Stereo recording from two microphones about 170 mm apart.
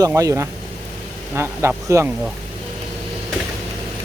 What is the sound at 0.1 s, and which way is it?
Speech, 15° right (ahead or behind).